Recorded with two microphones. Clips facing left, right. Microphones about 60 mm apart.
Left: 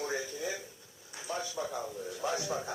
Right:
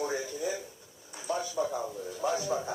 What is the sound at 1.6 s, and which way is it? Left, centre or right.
Speech, centre.